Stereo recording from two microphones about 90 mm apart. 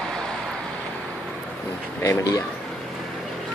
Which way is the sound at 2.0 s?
40° left (ahead or behind).